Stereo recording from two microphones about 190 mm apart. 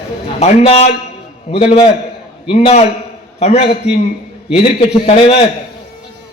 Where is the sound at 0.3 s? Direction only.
35° left (ahead or behind).